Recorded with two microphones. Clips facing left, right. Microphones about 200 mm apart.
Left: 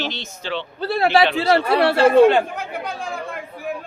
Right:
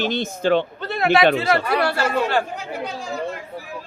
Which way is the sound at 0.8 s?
35° left (ahead or behind).